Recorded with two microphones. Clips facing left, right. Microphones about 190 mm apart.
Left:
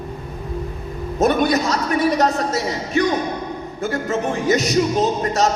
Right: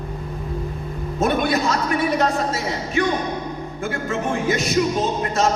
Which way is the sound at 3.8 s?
40° left (ahead or behind).